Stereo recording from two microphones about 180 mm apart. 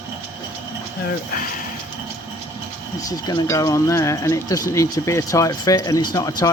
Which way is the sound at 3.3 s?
20° left (ahead or behind).